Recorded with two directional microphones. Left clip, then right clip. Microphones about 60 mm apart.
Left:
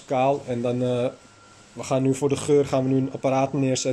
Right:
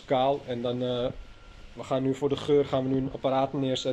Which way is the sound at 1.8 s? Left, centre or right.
Left.